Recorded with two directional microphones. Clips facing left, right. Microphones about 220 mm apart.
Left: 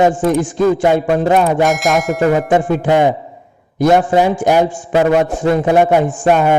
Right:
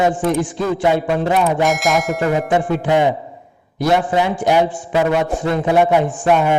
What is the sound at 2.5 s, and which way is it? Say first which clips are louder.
A man's voice: left 3 dB; 45° left (ahead or behind).